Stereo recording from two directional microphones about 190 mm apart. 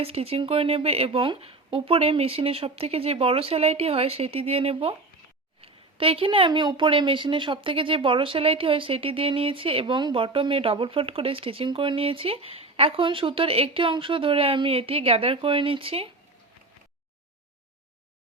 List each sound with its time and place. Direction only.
0.0 s speech: 30° right (ahead or behind)